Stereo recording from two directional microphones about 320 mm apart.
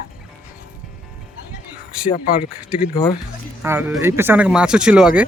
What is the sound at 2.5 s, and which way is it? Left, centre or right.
Speech, centre.